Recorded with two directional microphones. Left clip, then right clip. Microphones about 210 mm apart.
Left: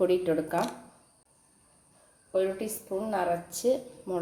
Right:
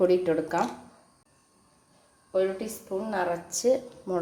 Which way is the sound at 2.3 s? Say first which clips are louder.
Right 2 dB; 5° left (ahead or behind).